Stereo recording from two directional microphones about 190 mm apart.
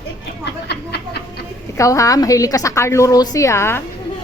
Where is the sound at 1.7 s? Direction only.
15° left (ahead or behind).